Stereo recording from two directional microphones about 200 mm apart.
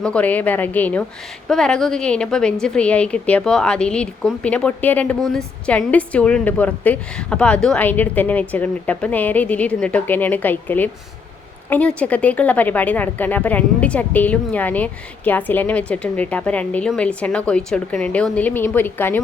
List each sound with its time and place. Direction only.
0.0 s a woman's voice: 5° left (ahead or behind)